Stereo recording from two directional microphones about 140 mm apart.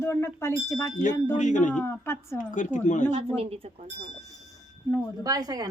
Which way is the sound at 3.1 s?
45° right (ahead or behind).